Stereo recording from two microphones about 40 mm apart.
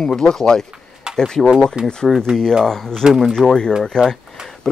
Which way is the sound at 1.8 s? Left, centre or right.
Right.